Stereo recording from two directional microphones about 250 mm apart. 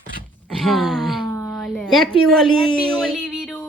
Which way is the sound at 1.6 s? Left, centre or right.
Centre.